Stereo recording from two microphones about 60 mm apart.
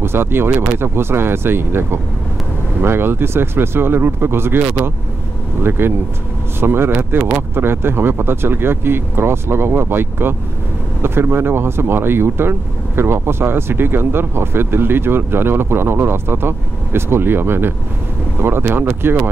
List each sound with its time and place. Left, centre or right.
0.0 s speech: right